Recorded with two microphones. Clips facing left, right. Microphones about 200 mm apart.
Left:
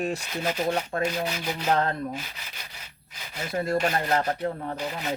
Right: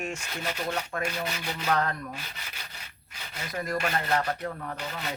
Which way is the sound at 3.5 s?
30° left (ahead or behind).